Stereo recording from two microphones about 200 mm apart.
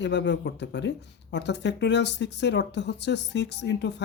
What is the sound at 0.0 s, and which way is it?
Speech, 60° left (ahead or behind).